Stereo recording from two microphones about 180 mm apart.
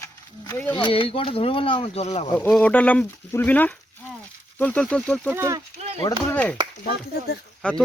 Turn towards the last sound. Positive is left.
turn(degrees=5)  # may be behind; listen again after turning